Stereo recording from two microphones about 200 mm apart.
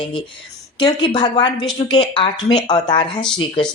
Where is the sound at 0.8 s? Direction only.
20° left (ahead or behind).